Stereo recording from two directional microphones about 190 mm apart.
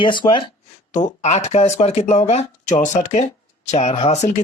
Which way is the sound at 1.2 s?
35° left (ahead or behind).